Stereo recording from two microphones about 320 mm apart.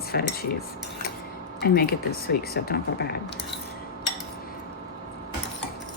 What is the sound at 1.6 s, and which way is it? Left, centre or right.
Speech, left.